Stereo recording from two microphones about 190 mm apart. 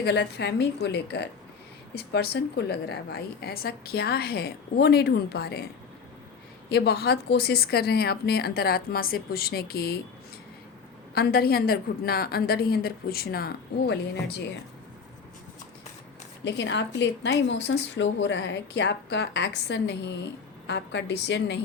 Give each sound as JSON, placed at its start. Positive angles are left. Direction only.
{"t": 0.0, "sound": "a woman's voice", "side_deg": 60}
{"t": 6.7, "sound": "a woman's voice", "side_deg": 60}
{"t": 11.1, "sound": "a woman's voice", "side_deg": 55}
{"t": 16.4, "sound": "a woman's voice", "side_deg": 70}